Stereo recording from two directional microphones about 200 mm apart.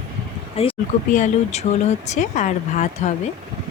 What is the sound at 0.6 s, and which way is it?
Speech, 30° left (ahead or behind).